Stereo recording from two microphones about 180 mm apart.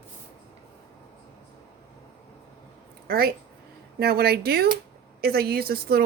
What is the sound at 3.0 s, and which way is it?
Speech, 55° right (ahead or behind).